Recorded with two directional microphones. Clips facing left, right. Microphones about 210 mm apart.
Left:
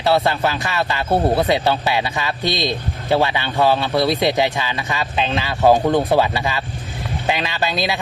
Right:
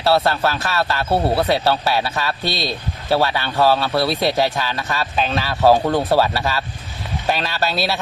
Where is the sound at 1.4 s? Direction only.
15° left (ahead or behind).